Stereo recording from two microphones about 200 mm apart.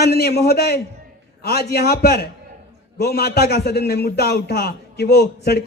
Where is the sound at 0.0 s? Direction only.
50° left (ahead or behind).